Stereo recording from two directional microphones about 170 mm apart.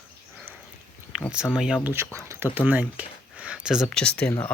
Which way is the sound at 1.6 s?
5° right (ahead or behind).